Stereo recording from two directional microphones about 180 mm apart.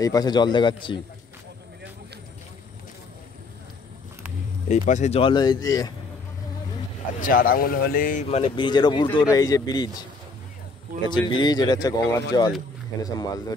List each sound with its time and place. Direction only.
0.0 s speech: 20° left (ahead or behind)
4.6 s speech: 40° left (ahead or behind)
5.2 s speech: 25° left (ahead or behind)
7.2 s speech: 50° left (ahead or behind)
8.3 s speech: 30° left (ahead or behind)
11.1 s speech: 25° left (ahead or behind)